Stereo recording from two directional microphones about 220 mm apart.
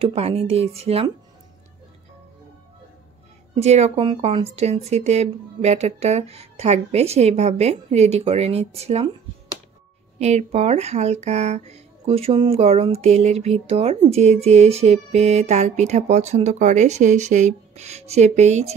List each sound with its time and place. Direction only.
0.0 s a woman's voice: 25° right (ahead or behind)
3.6 s a woman's voice: 30° right (ahead or behind)
10.1 s speech: 30° right (ahead or behind)